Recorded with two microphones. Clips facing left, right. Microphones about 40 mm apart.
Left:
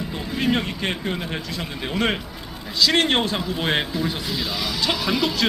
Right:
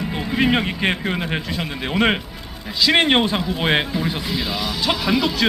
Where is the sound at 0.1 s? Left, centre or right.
Right.